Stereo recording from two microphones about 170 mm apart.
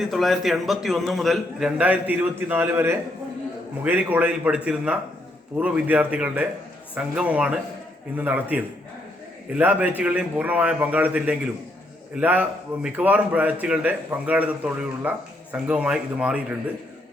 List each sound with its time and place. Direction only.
0.0 s a man's voice: centre (ahead or behind)